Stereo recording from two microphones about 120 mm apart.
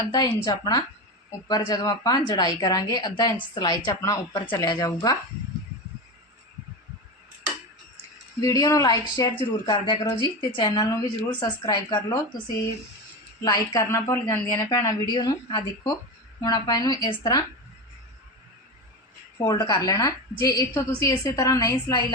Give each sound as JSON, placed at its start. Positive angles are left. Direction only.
{"t": 0.1, "sound": "a woman's voice", "side_deg": 35}
{"t": 8.4, "sound": "a woman's voice", "side_deg": 30}
{"t": 19.5, "sound": "a woman's voice", "side_deg": 35}